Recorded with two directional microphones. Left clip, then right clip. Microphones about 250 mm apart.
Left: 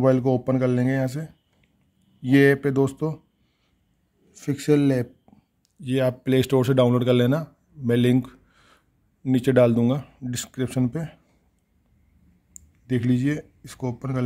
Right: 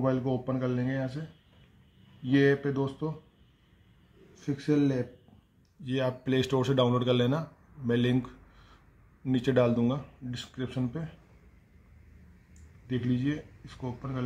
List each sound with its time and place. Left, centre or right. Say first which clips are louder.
0.0 s speech: left 9 dB; left
2.2 s speech: left 7 dB; left
4.4 s speech: left 7 dB; left
12.8 s speech: left 7 dB; left